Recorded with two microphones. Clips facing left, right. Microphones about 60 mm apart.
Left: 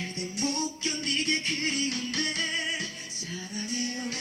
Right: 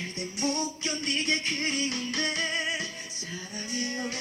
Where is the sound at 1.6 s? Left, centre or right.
Right.